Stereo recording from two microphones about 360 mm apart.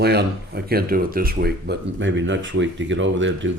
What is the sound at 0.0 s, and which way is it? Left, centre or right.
Speech, right.